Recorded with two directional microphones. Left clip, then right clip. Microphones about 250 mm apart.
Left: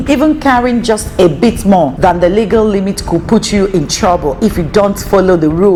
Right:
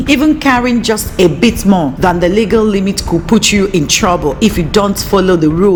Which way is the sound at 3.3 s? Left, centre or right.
Centre.